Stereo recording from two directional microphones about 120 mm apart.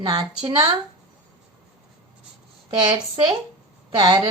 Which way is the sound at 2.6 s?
40° right (ahead or behind).